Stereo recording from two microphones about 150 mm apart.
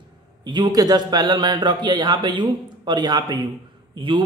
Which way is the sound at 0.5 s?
25° right (ahead or behind).